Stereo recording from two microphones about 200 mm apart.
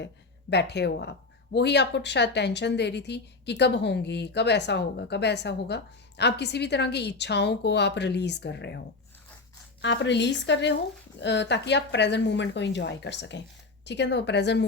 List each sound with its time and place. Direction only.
0.5 s a woman's voice: 55° left (ahead or behind)
9.8 s a woman's voice: 60° left (ahead or behind)